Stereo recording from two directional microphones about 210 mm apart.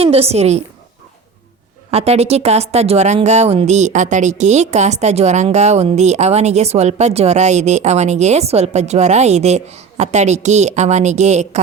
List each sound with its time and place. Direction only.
0.0 s a woman's voice: 30° right (ahead or behind)
1.9 s speech: 30° right (ahead or behind)